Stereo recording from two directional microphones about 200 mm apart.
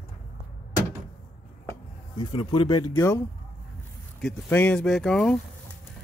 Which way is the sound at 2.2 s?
20° left (ahead or behind).